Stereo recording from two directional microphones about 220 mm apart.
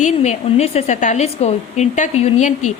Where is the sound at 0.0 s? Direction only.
30° left (ahead or behind).